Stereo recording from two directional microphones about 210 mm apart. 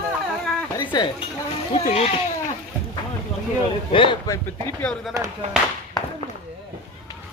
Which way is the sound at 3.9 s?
25° left (ahead or behind).